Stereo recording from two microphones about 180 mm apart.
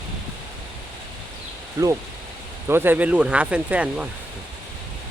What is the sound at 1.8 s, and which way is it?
Speech, 20° right (ahead or behind).